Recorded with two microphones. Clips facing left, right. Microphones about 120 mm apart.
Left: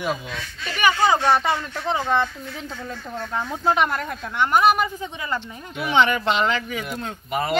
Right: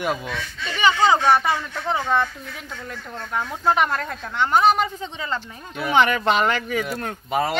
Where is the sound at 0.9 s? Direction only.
20° right (ahead or behind).